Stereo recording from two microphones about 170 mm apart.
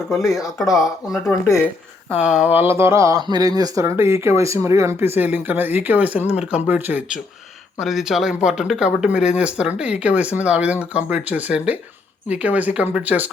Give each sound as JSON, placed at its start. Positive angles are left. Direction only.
{"t": 0.1, "sound": "speech", "side_deg": 0}
{"t": 1.5, "sound": "speech", "side_deg": 15}
{"t": 2.2, "sound": "speech", "side_deg": -5}